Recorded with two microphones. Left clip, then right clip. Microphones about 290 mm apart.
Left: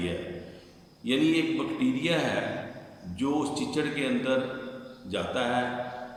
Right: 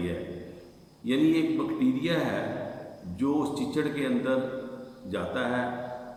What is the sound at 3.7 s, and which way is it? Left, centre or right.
A man's voice, centre.